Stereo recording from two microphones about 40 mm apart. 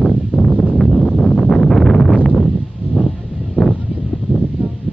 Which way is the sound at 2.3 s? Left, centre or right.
Centre.